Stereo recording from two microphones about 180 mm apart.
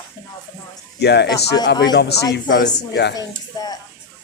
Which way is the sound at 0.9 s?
65° left (ahead or behind).